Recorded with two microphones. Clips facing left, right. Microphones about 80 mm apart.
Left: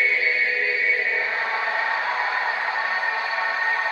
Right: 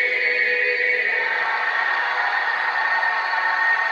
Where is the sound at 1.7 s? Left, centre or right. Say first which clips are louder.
Right 2 dB; right.